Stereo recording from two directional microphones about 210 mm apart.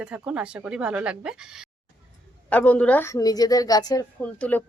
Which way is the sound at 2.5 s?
10° left (ahead or behind).